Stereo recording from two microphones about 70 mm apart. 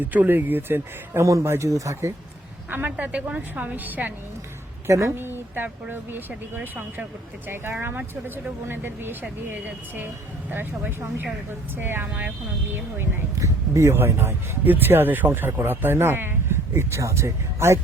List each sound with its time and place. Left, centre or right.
0.0 s a woman's voice: right
1.2 s speech: right
2.6 s a woman's voice: right
4.9 s speech: right
5.1 s speech: right
7.4 s a woman's voice: right
13.4 s speech: right